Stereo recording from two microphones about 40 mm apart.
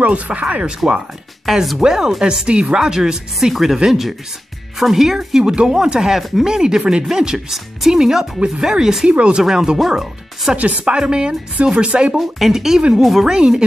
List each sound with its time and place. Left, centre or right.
0.0 s speech: right
1.4 s speech: centre
1.8 s speech: centre
2.4 s a woman's voice: right; by 10.5 s centre
10.5 s a woman's voice: right
12.2 s speech: centre
13.3 s a woman's voice: right